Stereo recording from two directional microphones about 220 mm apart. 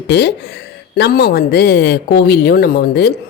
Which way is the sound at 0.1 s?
50° left (ahead or behind).